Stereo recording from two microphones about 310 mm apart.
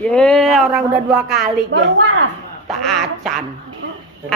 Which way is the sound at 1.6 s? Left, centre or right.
Right.